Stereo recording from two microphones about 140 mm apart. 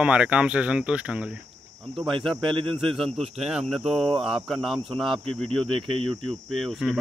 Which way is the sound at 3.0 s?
45° right (ahead or behind).